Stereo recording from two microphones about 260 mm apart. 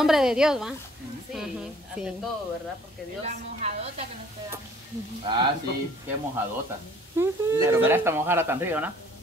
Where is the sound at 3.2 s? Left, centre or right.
Right.